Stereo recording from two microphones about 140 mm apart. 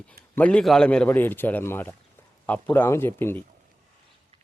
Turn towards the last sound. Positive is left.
turn(degrees=15)  # may be behind; listen again after turning